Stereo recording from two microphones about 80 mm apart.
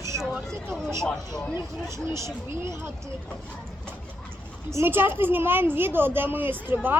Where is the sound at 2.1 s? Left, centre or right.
Right.